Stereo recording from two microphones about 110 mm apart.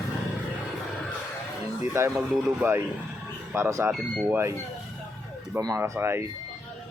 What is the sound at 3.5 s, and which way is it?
Speech, 25° right (ahead or behind).